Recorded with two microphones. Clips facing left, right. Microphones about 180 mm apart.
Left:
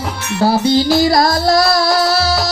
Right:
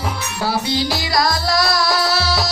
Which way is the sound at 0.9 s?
50° left (ahead or behind).